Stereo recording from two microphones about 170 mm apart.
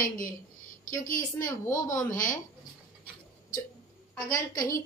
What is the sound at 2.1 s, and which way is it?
Speech, 50° left (ahead or behind).